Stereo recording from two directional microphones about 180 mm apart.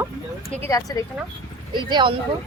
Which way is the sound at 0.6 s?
20° left (ahead or behind).